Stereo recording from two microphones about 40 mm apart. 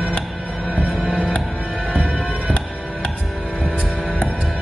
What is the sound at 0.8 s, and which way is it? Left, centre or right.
Music, centre.